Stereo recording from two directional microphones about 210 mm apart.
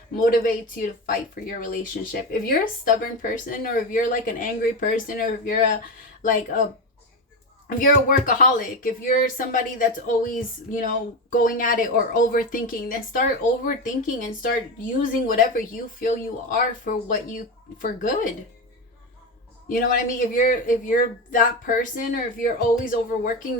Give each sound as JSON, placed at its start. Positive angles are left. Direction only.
{"t": 0.3, "sound": "speech", "side_deg": 40}
{"t": 7.7, "sound": "speech", "side_deg": 40}
{"t": 19.6, "sound": "speech", "side_deg": 40}